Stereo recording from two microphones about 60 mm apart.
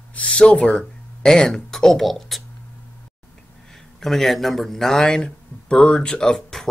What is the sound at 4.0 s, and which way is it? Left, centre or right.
Speech, centre.